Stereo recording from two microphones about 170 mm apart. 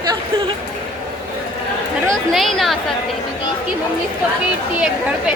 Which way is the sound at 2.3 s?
Centre (ahead or behind).